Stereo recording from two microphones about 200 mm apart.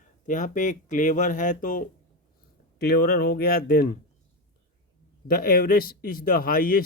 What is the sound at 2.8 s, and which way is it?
Speech, 55° left (ahead or behind).